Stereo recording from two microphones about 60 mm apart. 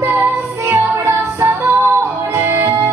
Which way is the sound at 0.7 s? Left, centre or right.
Right.